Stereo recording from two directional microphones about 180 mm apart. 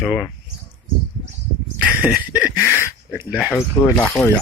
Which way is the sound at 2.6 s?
15° left (ahead or behind).